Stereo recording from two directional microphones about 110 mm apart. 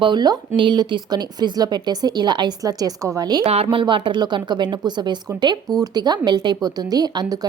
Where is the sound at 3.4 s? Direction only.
65° right (ahead or behind).